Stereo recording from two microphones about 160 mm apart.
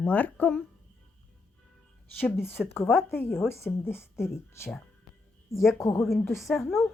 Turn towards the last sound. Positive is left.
turn(degrees=15)  # may be behind; listen again after turning